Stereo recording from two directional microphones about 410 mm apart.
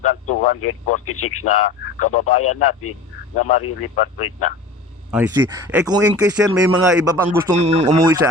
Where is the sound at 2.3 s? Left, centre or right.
Left.